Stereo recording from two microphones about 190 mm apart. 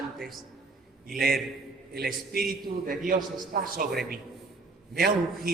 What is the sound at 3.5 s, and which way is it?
A man's voice, 50° right (ahead or behind).